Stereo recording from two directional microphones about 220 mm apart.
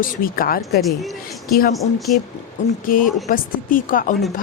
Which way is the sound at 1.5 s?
40° left (ahead or behind).